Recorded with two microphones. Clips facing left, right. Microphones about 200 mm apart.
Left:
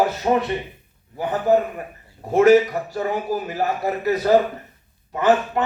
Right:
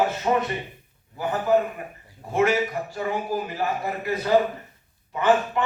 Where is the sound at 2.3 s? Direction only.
40° left (ahead or behind).